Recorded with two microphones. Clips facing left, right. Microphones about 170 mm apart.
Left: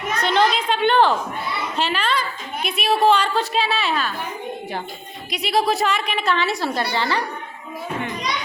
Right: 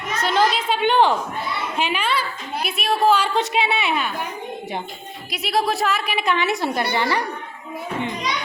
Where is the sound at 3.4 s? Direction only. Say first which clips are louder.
Right 1 dB; 20° right (ahead or behind).